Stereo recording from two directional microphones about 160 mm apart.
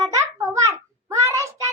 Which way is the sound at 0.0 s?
20° right (ahead or behind).